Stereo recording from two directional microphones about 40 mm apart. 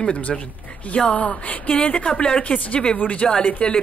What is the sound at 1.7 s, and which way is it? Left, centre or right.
Speech, left.